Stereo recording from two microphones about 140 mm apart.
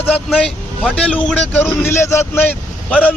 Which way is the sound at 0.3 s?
5° left (ahead or behind).